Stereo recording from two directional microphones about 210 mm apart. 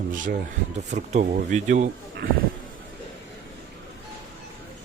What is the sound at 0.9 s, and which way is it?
Speech, 35° right (ahead or behind).